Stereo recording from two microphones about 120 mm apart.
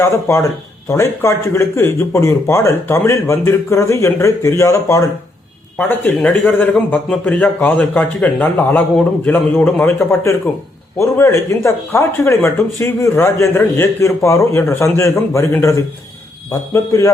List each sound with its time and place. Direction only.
0.0 s a man's voice: 20° left (ahead or behind)